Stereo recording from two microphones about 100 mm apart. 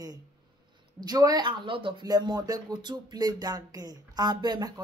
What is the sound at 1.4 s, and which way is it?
Speech, 55° right (ahead or behind).